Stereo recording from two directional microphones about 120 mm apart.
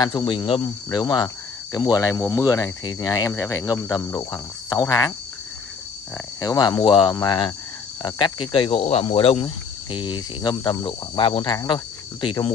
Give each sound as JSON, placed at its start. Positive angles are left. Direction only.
{"t": 0.0, "sound": "speech", "side_deg": 40}
{"t": 6.4, "sound": "speech", "side_deg": 30}
{"t": 9.4, "sound": "speech", "side_deg": 35}